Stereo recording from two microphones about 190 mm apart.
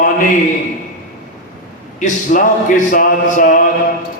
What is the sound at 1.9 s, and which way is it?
Speech, 40° left (ahead or behind).